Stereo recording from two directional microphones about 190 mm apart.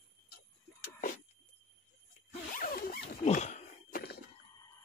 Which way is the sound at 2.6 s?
50° left (ahead or behind).